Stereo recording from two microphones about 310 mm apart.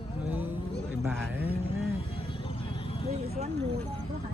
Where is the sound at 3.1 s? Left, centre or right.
Right.